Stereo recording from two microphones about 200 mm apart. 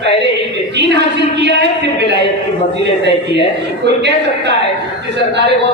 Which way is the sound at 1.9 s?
55° right (ahead or behind).